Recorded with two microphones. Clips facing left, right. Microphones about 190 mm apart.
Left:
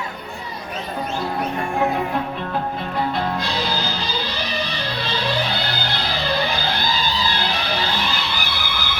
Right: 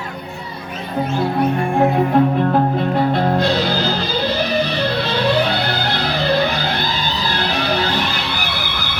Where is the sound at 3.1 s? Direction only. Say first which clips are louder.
Right 7 dB; 50° right (ahead or behind).